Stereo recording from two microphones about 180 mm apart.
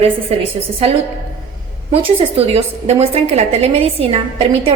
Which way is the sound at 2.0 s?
35° right (ahead or behind).